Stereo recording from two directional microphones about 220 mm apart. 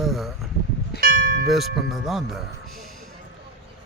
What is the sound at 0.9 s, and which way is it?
Church bell, 40° right (ahead or behind).